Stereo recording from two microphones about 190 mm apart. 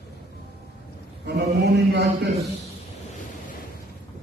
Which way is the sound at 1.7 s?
65° right (ahead or behind).